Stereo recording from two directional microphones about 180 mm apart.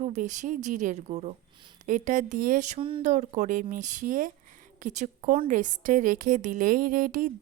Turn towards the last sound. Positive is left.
turn(degrees=-50)  # may be behind; listen again after turning